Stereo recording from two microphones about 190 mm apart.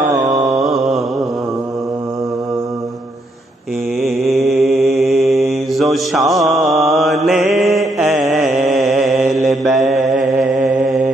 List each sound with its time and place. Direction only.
4.0 s mantra: centre (ahead or behind)
9.9 s mantra: 40° right (ahead or behind)